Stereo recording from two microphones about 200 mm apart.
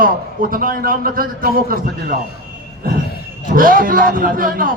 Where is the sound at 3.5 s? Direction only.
45° right (ahead or behind).